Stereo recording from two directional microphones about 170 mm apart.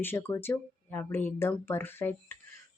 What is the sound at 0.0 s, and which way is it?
Speech, 15° left (ahead or behind).